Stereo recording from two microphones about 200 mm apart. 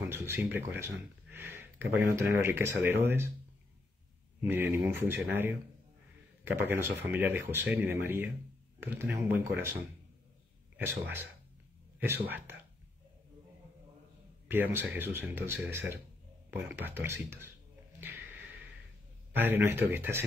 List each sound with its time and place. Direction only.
0.1 s a sound: 10° right (ahead or behind)
2.1 s speech: 15° right (ahead or behind)
4.4 s speech: 10° right (ahead or behind)
12.0 s speech: 10° right (ahead or behind)
14.5 s speech: 10° right (ahead or behind)
18.0 s a sound: 10° right (ahead or behind)
19.3 s speech: 10° right (ahead or behind)